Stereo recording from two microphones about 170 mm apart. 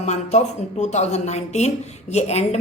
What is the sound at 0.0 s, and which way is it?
Speech, 40° left (ahead or behind).